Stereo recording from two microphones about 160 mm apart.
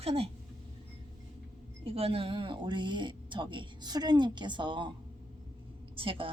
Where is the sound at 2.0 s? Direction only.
35° right (ahead or behind).